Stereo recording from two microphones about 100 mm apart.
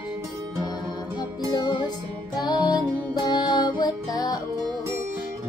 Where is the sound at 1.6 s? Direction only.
45° left (ahead or behind).